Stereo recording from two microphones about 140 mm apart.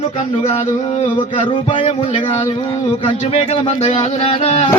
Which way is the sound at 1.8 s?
55° left (ahead or behind).